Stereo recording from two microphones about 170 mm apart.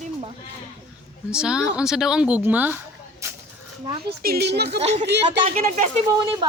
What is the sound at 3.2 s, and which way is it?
Livestock, 15° right (ahead or behind).